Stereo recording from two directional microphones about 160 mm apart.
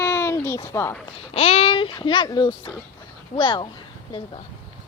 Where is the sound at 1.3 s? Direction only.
40° left (ahead or behind).